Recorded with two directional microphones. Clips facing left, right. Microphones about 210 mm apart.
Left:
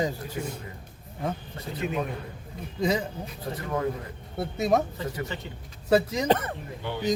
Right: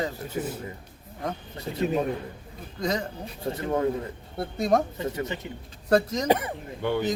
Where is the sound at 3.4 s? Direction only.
25° right (ahead or behind).